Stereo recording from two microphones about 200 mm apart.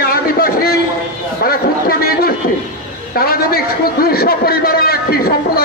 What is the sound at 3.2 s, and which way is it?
A man's voice, 50° left (ahead or behind).